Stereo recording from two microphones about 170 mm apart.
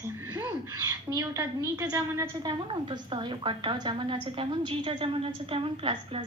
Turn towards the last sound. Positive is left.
turn(degrees=-30)  # may be behind; listen again after turning